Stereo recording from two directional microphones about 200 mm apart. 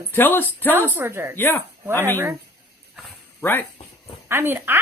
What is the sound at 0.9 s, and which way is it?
Speech, 10° right (ahead or behind).